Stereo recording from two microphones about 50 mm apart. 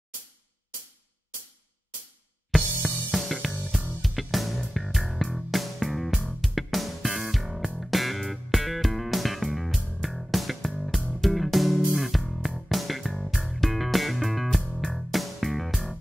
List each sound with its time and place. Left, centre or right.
2.8 s music: centre
14.6 s music: centre
14.9 s music: centre